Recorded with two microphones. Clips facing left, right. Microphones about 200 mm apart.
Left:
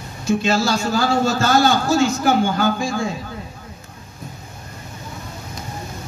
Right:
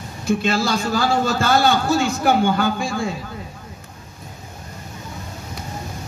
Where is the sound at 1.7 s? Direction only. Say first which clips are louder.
Left 1 dB; 60° right (ahead or behind).